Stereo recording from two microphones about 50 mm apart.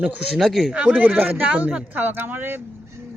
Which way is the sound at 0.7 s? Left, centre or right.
Centre.